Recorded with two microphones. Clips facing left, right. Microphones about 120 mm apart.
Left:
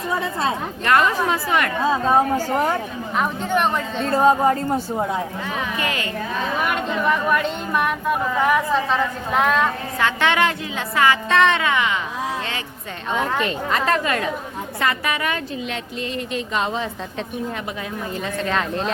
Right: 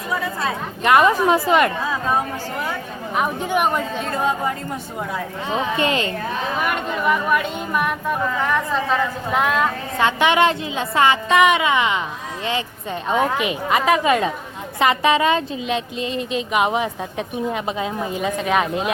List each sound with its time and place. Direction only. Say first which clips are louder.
0.1 s speech: left 1 dB; 25° left (ahead or behind)
0.9 s a woman's voice: right 4 dB; 15° right (ahead or behind)
1.9 s speech: left 4 dB; 30° left (ahead or behind)
3.2 s a woman's voice: right 1 dB; 10° right (ahead or behind)
4.1 s speech: left 8 dB; 40° left (ahead or behind)
5.5 s a woman's voice: right 5 dB; 25° right (ahead or behind)
6.7 s speech: right 1 dB; 5° right (ahead or behind)
10.0 s a woman's voice: right 3 dB; 15° right (ahead or behind)
11.3 s a woman's voice: right 2 dB; 10° right (ahead or behind)
13.1 s a woman's voice: right 2 dB; 15° right (ahead or behind)